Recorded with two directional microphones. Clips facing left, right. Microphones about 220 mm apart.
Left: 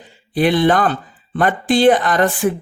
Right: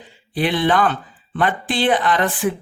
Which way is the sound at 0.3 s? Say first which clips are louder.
Left 4 dB; 45° left (ahead or behind).